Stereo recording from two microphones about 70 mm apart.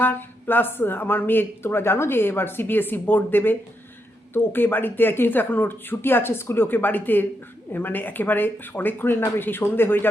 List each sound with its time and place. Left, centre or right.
0.0 s speech: left